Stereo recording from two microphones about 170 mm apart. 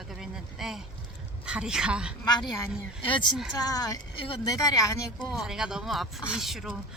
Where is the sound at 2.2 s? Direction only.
25° left (ahead or behind).